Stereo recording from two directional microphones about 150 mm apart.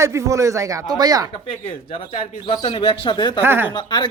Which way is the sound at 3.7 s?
30° left (ahead or behind).